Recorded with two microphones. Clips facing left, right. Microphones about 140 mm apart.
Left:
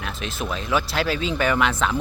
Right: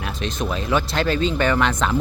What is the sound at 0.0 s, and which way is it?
Speech, 5° left (ahead or behind).